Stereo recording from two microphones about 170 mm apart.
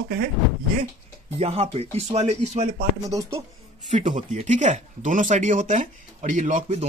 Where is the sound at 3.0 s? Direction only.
20° right (ahead or behind).